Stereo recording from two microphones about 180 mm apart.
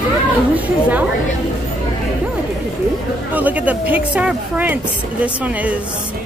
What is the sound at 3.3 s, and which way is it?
Speech, 10° right (ahead or behind).